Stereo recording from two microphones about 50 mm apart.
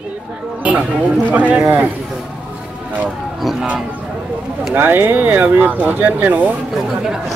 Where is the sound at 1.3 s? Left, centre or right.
Right.